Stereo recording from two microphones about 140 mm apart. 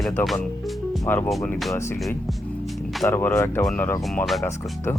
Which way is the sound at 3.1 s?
20° left (ahead or behind).